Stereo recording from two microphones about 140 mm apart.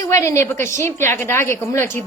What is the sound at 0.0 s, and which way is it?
A woman's voice, 20° left (ahead or behind).